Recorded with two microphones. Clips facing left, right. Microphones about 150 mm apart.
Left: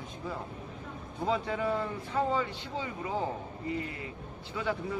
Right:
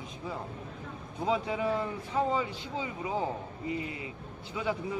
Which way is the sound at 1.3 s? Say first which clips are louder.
Right 1 dB; 10° right (ahead or behind).